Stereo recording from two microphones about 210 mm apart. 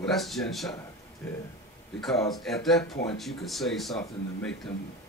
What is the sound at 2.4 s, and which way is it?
Speech, centre (ahead or behind).